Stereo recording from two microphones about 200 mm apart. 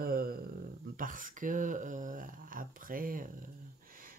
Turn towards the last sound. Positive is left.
turn(degrees=-45)  # may be behind; listen again after turning